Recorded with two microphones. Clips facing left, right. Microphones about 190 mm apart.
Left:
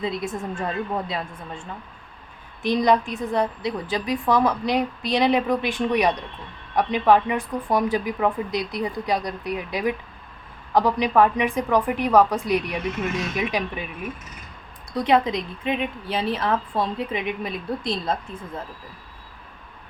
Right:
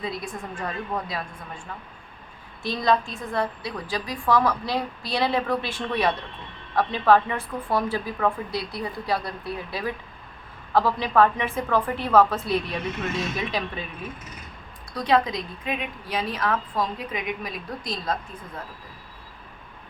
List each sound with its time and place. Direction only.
0.0 s a woman's voice: 25° left (ahead or behind)
2.6 s a woman's voice: 15° left (ahead or behind)
14.9 s a woman's voice: 20° left (ahead or behind)